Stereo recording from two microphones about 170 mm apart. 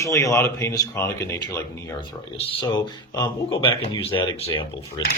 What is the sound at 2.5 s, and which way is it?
Speech, 25° left (ahead or behind).